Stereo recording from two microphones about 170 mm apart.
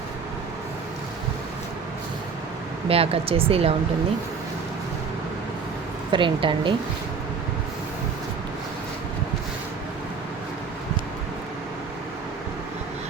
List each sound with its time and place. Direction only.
2.9 s speech: 35° right (ahead or behind)
6.1 s a woman's voice: 30° right (ahead or behind)